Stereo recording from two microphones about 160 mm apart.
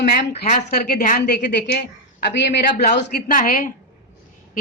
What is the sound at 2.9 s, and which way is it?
Speech, 75° left (ahead or behind).